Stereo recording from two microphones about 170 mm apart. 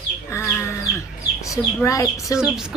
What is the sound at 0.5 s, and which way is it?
Sheep, 15° left (ahead or behind).